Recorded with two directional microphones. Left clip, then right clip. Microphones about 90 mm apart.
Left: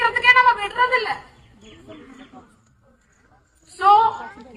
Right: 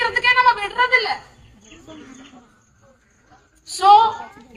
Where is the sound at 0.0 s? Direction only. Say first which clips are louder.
Left 1 dB; 50° right (ahead or behind).